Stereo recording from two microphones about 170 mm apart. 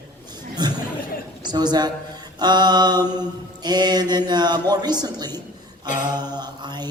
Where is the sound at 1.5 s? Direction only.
25° right (ahead or behind).